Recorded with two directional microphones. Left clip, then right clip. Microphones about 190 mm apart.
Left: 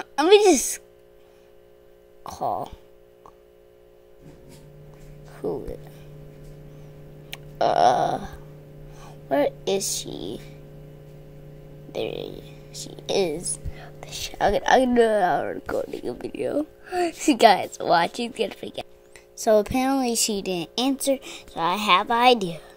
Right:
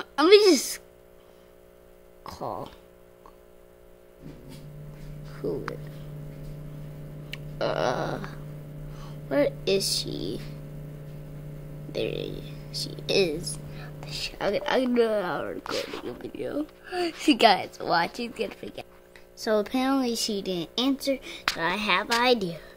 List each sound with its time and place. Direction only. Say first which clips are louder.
0.3 s a woman's voice: left 2 dB; 10° left (ahead or behind)
2.2 s a woman's voice: left 7 dB; 10° left (ahead or behind)
5.3 s music: left 2 dB; 15° left (ahead or behind)
7.2 s a sound: left 7 dB; 20° left (ahead or behind)
8.9 s speech: left 3 dB; 10° left (ahead or behind)
11.9 s speech: left 1 dB; centre (ahead or behind)
14.4 s speech: left 7 dB; 20° left (ahead or behind)